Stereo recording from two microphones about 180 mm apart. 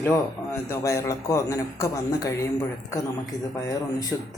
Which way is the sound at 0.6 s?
15° left (ahead or behind).